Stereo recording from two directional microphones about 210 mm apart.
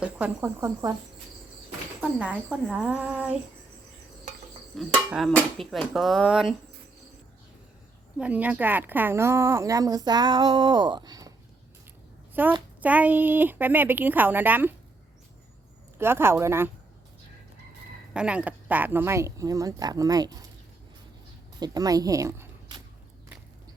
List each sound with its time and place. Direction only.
0.0 s speech: 10° right (ahead or behind)
2.0 s speech: 5° right (ahead or behind)
4.8 s speech: centre (ahead or behind)
8.2 s speech: 5° right (ahead or behind)
12.3 s a child's voice: 10° right (ahead or behind)
16.0 s speech: 10° right (ahead or behind)
18.1 s speech: 5° right (ahead or behind)
21.6 s speech: 15° right (ahead or behind)